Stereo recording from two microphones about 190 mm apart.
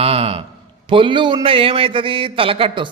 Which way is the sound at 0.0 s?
30° right (ahead or behind).